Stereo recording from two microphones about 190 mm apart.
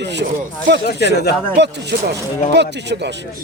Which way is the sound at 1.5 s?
65° right (ahead or behind).